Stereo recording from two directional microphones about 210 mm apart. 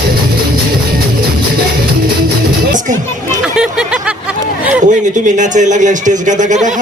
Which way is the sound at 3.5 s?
5° right (ahead or behind).